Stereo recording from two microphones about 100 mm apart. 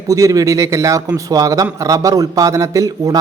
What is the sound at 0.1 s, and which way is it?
A man's voice, 35° right (ahead or behind).